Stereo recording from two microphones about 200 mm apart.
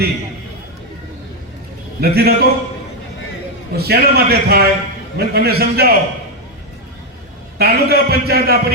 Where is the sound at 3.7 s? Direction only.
50° right (ahead or behind).